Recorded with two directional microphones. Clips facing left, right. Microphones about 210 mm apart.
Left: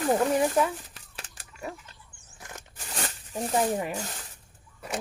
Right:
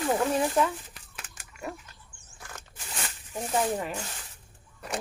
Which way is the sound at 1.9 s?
30° left (ahead or behind).